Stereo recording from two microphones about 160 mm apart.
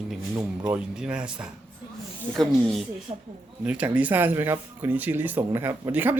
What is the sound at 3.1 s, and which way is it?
Speech, 30° right (ahead or behind).